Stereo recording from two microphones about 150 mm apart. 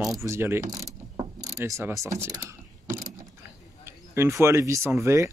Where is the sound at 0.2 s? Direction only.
15° right (ahead or behind).